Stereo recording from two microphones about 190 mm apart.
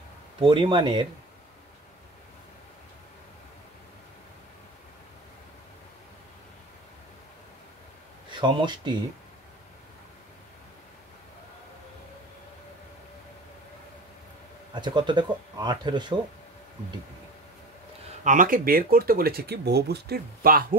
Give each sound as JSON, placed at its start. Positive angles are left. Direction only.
{"t": 0.4, "sound": "speech", "side_deg": -25}
{"t": 8.3, "sound": "speech", "side_deg": -25}
{"t": 14.7, "sound": "speech", "side_deg": -25}
{"t": 18.2, "sound": "speech", "side_deg": -45}